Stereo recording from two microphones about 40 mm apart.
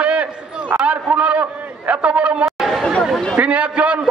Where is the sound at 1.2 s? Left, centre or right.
Right.